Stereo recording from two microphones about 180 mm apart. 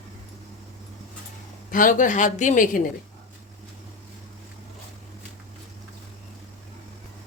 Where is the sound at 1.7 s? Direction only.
50° left (ahead or behind).